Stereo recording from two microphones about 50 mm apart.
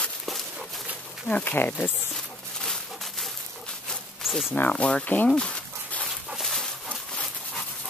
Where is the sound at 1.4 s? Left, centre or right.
Left.